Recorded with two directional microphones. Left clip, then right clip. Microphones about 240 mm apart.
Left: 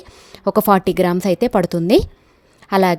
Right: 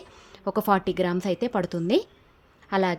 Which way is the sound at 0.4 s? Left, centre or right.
Left.